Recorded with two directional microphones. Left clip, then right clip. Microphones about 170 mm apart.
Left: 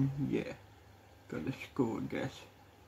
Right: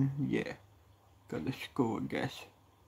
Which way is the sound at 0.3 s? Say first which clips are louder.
Right 1 dB; 55° right (ahead or behind).